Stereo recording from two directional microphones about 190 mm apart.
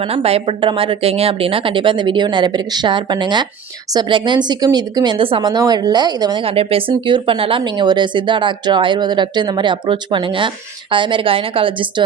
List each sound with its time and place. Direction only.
0.0 s a woman's voice: 30° right (ahead or behind)